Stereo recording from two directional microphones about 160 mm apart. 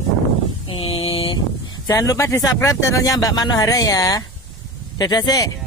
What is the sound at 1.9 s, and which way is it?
Speech, 20° left (ahead or behind).